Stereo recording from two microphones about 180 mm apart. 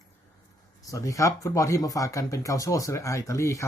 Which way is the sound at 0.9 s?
20° left (ahead or behind).